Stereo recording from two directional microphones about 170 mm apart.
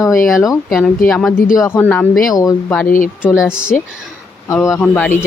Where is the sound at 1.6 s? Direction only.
10° left (ahead or behind).